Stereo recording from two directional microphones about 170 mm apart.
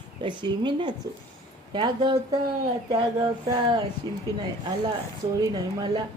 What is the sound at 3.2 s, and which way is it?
Speech, 25° right (ahead or behind).